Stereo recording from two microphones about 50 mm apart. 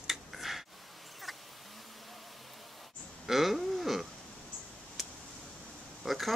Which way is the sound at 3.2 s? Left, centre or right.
Centre.